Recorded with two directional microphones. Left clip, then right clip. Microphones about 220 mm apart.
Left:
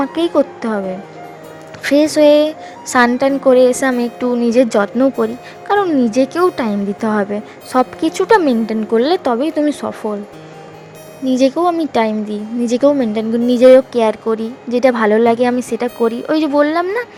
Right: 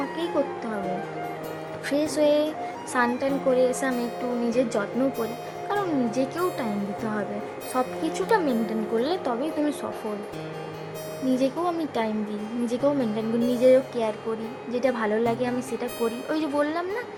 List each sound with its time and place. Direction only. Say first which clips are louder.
0.2 s a woman's voice: left 12 dB; 40° left (ahead or behind)
1.8 s a woman's voice: left 13 dB; 35° left (ahead or behind)
11.3 s a woman's voice: left 12 dB; 25° left (ahead or behind)